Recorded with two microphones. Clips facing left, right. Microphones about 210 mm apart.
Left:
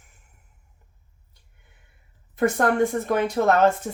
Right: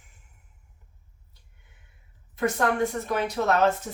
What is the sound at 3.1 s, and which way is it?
Speech, 50° left (ahead or behind).